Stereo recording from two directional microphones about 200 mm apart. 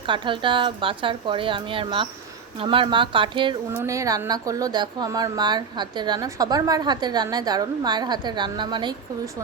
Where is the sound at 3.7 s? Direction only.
15° right (ahead or behind).